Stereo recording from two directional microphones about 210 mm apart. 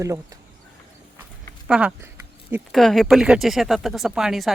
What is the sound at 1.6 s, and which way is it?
A woman's voice, 5° right (ahead or behind).